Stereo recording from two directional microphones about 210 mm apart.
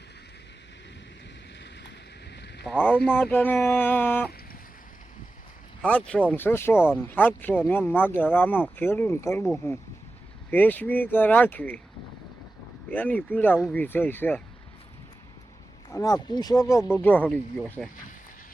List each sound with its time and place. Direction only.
2.6 s speech: 10° left (ahead or behind)
5.8 s speech: 5° left (ahead or behind)
6.7 s speech: 5° right (ahead or behind)
7.1 s speech: 10° left (ahead or behind)
12.9 s speech: 10° left (ahead or behind)
15.9 s speech: 15° left (ahead or behind)